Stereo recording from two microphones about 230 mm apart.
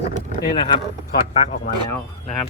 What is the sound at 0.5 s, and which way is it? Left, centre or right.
Speech, left.